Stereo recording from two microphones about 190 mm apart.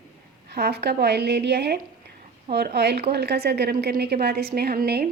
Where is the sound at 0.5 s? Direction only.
55° right (ahead or behind).